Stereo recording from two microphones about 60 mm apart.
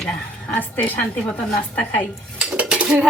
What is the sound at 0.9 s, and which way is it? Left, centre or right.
Speech, left.